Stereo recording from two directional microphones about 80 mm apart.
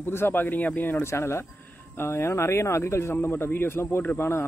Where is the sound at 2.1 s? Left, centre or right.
Left.